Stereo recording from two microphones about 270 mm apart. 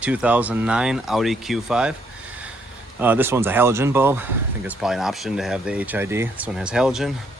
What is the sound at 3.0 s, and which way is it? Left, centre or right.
Speech, centre.